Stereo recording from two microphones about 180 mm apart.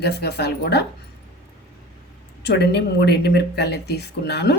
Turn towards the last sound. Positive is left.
turn(degrees=70)  # may be behind; listen again after turning